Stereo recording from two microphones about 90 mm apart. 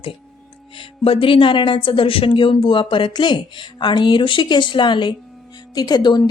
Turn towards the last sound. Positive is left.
turn(degrees=50)  # may be behind; listen again after turning